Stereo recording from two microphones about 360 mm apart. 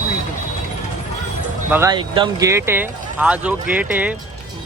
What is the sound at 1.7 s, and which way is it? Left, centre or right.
A man's voice, centre.